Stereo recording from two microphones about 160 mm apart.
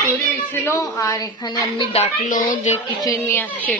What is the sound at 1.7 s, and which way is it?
Speech, 35° left (ahead or behind).